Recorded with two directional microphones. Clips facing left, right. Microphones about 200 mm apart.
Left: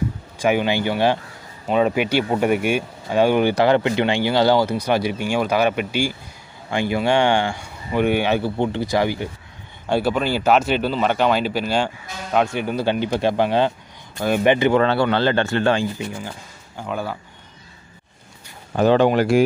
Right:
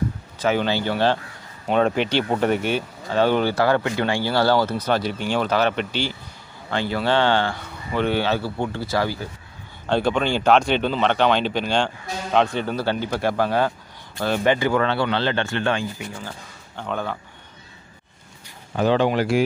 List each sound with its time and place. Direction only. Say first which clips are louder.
0.4 s speech: left 2 dB; 15° left (ahead or behind)
14.9 s speech: left 4 dB; 45° left (ahead or behind)
16.2 s speech: left 3 dB; 10° left (ahead or behind)
18.8 s speech: left 4 dB; 50° left (ahead or behind)